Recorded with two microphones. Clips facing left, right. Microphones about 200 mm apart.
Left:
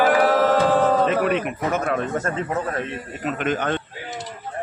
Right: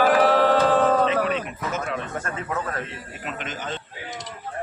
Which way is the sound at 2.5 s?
30° left (ahead or behind).